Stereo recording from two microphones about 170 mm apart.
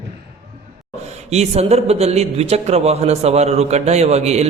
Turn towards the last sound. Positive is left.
turn(degrees=-40)  # may be behind; listen again after turning